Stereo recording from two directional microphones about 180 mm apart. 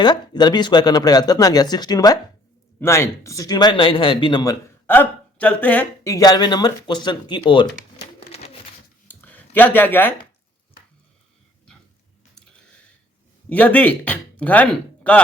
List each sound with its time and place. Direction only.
0.0 s speech: 25° left (ahead or behind)
4.9 s speech: 10° left (ahead or behind); by 7.7 s 25° left (ahead or behind)
8.3 s pigeon: 35° left (ahead or behind)
9.0 s a sound: 10° left (ahead or behind)
13.5 s speech: 10° left (ahead or behind)